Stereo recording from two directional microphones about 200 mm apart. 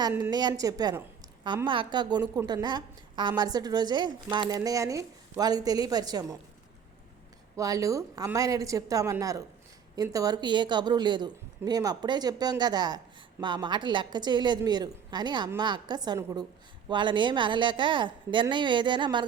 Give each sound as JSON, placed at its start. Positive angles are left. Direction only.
{"t": 0.1, "sound": "a woman's voice", "side_deg": -15}
{"t": 7.5, "sound": "a woman's voice", "side_deg": -15}